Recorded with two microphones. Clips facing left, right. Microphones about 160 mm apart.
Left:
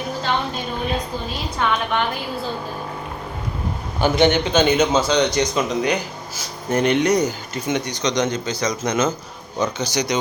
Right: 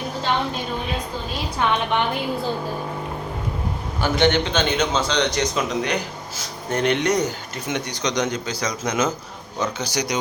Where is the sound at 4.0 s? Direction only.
10° left (ahead or behind).